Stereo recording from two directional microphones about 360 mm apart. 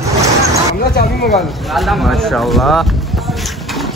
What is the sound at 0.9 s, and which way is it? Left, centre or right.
Speech, left.